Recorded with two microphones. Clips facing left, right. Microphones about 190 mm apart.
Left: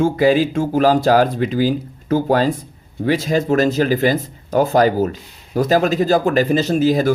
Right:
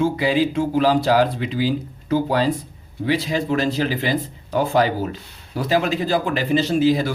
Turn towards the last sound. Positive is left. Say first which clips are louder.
# left 2 dB
turn(degrees=45)  # may be behind; listen again after turning